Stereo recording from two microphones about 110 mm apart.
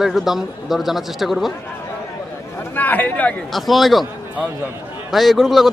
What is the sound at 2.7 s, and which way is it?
Speech, 15° left (ahead or behind).